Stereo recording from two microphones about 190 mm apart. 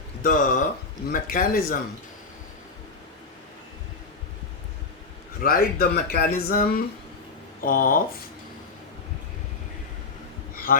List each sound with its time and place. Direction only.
0.2 s speech: 45° left (ahead or behind)
5.4 s speech: 55° left (ahead or behind)
10.5 s a sound: 50° left (ahead or behind)